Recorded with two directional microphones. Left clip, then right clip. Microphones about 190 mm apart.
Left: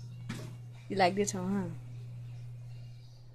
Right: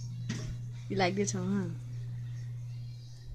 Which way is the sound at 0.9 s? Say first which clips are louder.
Left 2 dB; 50° left (ahead or behind).